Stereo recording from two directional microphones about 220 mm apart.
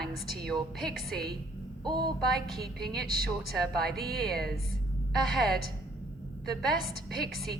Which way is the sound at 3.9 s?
45° right (ahead or behind).